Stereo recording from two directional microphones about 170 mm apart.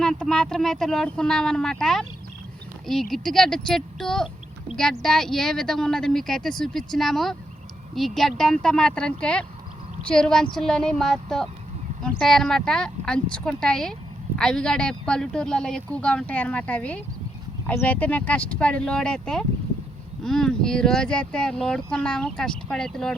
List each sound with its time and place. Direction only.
0.0 s speech: 5° left (ahead or behind)